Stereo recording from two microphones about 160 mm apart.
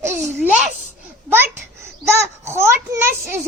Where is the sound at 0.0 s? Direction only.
15° right (ahead or behind).